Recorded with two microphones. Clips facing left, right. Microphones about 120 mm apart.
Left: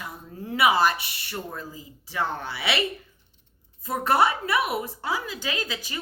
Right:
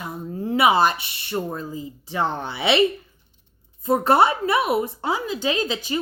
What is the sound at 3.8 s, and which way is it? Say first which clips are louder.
Speech: right 5 dB; 25° right (ahead or behind).